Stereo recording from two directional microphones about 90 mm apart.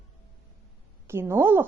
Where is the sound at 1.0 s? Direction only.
25° right (ahead or behind).